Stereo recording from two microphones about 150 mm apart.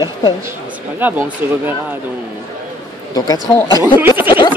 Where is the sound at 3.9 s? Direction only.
15° right (ahead or behind).